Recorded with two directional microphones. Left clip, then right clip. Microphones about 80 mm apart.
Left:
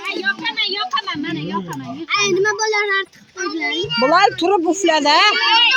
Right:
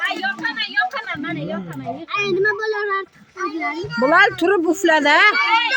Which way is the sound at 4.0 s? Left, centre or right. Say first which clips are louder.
Even; right.